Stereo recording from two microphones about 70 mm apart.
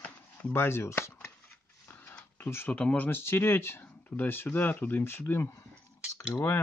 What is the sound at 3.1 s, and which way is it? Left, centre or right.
Speech, left.